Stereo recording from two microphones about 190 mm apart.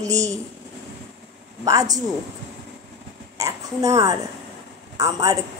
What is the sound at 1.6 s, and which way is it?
Speech, 20° right (ahead or behind).